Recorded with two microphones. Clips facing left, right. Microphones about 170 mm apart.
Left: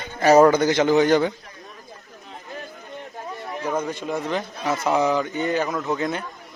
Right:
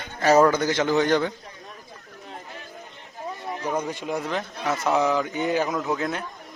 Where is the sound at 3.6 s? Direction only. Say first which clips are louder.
Left 2 dB; 15° right (ahead or behind).